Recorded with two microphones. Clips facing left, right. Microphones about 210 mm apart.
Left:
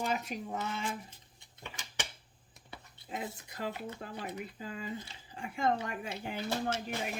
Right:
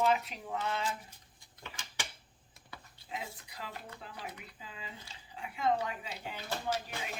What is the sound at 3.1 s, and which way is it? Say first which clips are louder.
Speech: left 3 dB; 50° left (ahead or behind).